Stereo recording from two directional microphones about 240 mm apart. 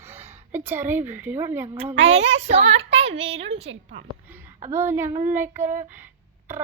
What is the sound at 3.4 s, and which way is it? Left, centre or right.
Speech, right.